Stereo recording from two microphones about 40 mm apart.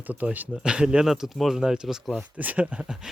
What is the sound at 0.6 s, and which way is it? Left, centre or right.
Speech, right.